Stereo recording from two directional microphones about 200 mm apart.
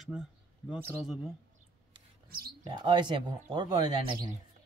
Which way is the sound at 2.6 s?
25° right (ahead or behind).